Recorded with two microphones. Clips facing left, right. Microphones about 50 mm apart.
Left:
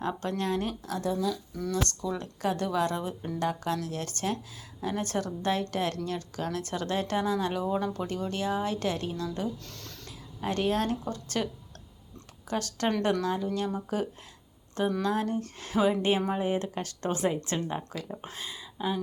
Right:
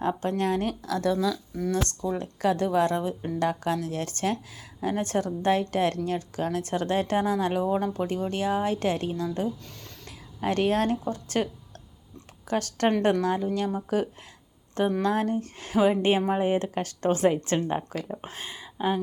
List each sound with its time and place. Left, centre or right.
0.0 s a woman's voice: right
0.7 s speech: right
2.0 s a woman's voice: right
10.1 s a sound: right
11.1 s a woman's voice: right
12.5 s a woman's voice: right
18.1 s speech: right
18.3 s speech: right